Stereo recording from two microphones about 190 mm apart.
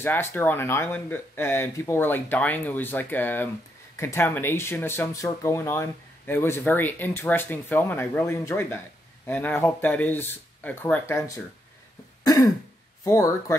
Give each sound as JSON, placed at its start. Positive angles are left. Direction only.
{"t": 0.0, "sound": "speech", "side_deg": 10}
{"t": 12.2, "sound": "throat clearing", "side_deg": 20}
{"t": 13.0, "sound": "speech", "side_deg": 15}